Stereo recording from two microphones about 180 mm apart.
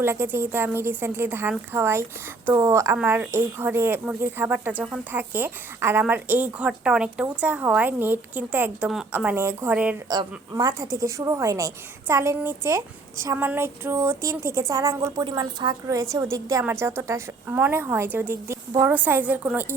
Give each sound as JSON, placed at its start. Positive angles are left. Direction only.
{"t": 0.0, "sound": "speech", "side_deg": -10}
{"t": 10.1, "sound": "speech", "side_deg": -20}